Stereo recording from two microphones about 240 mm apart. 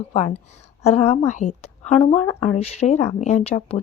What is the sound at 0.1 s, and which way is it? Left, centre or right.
A woman's voice, left.